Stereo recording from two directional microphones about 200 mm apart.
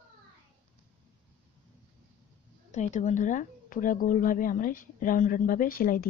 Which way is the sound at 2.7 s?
35° left (ahead or behind).